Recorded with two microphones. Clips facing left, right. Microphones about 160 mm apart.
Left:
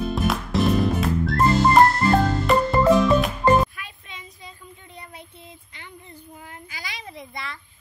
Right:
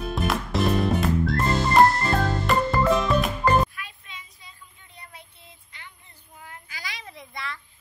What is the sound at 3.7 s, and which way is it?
Music, 20° left (ahead or behind).